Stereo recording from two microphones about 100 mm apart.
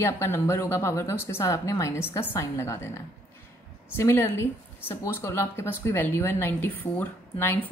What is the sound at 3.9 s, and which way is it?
Speech, 25° left (ahead or behind).